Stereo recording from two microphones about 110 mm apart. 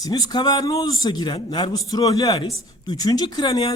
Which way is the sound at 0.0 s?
40° left (ahead or behind).